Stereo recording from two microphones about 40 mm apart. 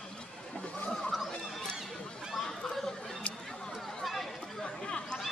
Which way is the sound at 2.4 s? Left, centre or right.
Centre.